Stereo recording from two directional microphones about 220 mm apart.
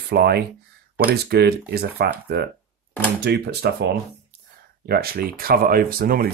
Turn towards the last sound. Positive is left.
turn(degrees=-40)  # may be behind; listen again after turning